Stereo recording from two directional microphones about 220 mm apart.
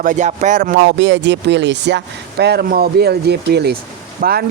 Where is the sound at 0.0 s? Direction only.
35° right (ahead or behind).